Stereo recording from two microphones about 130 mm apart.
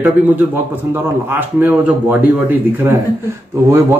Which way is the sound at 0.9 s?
15° right (ahead or behind).